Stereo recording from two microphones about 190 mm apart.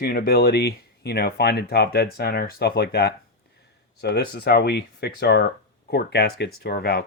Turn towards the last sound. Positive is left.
turn(degrees=55)  # may be behind; listen again after turning